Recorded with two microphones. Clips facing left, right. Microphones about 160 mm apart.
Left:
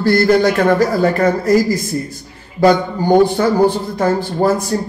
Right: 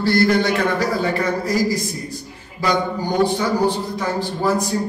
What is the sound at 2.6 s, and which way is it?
Speech, 55° left (ahead or behind).